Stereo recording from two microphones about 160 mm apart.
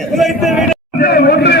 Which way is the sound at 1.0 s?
75° left (ahead or behind).